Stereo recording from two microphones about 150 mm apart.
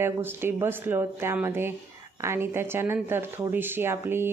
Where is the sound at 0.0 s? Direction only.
15° right (ahead or behind).